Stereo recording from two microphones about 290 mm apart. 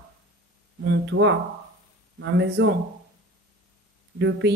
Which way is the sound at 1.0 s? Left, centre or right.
Right.